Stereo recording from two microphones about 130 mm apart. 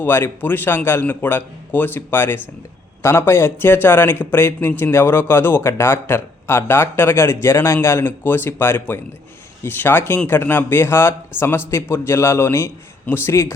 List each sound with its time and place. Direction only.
0.0 s a man's voice: 15° left (ahead or behind)